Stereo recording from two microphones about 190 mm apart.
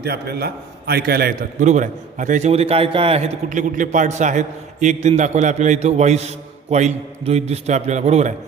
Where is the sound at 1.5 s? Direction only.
40° right (ahead or behind).